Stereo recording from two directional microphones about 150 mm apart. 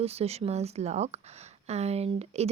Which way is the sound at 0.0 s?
45° right (ahead or behind).